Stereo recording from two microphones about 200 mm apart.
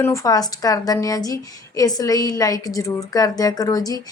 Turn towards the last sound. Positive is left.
turn(degrees=20)  # may be behind; listen again after turning